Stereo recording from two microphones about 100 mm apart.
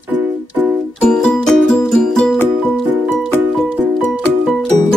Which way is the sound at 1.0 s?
10° left (ahead or behind).